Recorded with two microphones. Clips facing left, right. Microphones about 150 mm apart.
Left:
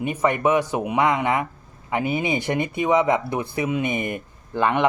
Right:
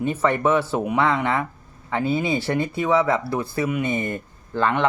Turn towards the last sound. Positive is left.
turn(degrees=15)  # may be behind; listen again after turning